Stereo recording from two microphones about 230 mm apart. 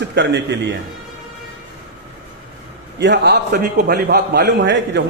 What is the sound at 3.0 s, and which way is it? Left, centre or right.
A man's voice, right.